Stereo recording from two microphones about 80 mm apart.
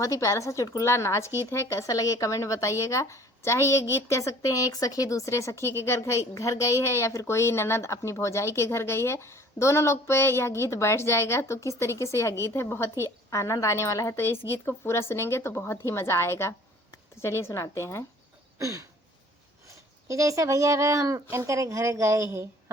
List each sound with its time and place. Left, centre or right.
0.0 s speech: left
14.3 s speech: left
18.6 s a sound: right
20.1 s a woman's voice: right